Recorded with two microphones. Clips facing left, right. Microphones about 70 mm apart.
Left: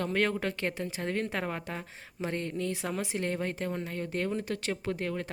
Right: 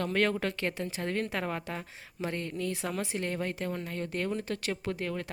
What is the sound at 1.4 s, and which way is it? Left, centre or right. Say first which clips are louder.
Speech: right 1 dB; centre.